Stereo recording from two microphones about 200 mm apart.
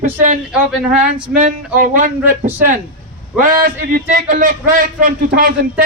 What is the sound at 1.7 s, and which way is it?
Speech, 45° right (ahead or behind).